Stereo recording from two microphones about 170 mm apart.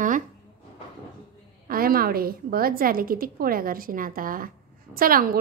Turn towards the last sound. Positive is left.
turn(degrees=-55)  # may be behind; listen again after turning